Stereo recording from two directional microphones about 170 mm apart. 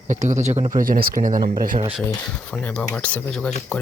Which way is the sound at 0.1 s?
45° right (ahead or behind).